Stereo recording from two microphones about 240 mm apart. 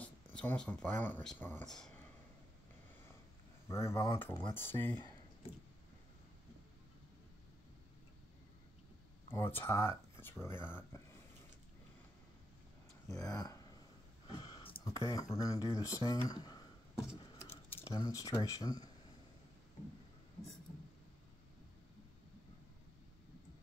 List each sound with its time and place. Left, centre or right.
0.0 s speech: centre
3.6 s speech: centre
9.3 s speech: centre
13.1 s speech: centre
16.3 s a sound: centre
17.8 s speech: centre